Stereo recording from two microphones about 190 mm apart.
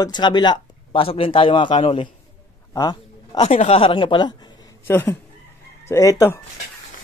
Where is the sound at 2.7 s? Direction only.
20° left (ahead or behind).